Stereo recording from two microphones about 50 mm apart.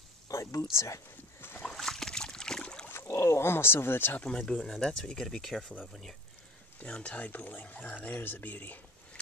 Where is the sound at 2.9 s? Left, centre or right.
Left.